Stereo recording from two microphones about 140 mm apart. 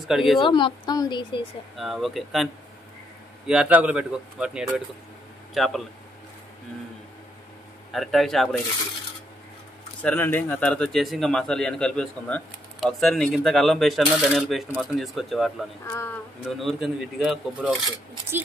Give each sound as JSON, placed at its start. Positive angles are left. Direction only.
{"t": 0.1, "sound": "speech", "side_deg": 0}
{"t": 0.4, "sound": "a woman's voice", "side_deg": 35}
{"t": 1.8, "sound": "a man's voice", "side_deg": 0}
{"t": 7.9, "sound": "speech", "side_deg": 0}
{"t": 10.0, "sound": "speech", "side_deg": 15}